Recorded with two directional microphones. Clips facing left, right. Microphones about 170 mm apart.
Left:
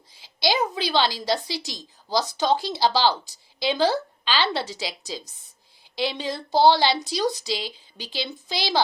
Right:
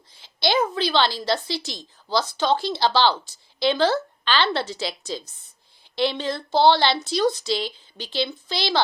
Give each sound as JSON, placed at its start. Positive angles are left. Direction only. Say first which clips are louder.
{"t": 0.1, "sound": "a woman's voice", "louder": "right 2 dB", "side_deg": 10}